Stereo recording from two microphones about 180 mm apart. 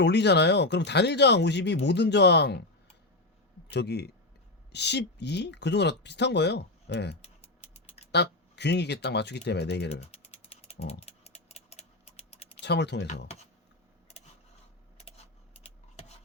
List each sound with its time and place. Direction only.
0.0 s speech: 70° left (ahead or behind)
3.7 s speech: 70° left (ahead or behind)
7.2 s typing: 35° left (ahead or behind)
8.1 s speech: 70° left (ahead or behind)
10.1 s ratchet: 35° left (ahead or behind)
12.5 s speech: 70° left (ahead or behind)
14.9 s a sound: 35° left (ahead or behind)